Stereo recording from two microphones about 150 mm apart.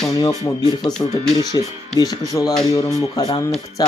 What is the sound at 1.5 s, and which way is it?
Speech, 25° left (ahead or behind).